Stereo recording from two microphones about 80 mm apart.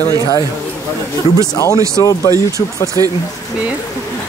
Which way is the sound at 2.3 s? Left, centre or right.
Left.